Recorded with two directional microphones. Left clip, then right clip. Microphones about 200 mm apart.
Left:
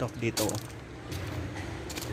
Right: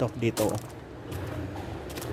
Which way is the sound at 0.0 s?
30° right (ahead or behind).